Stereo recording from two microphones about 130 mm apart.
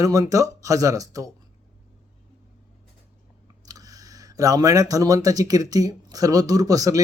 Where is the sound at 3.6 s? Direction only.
30° right (ahead or behind).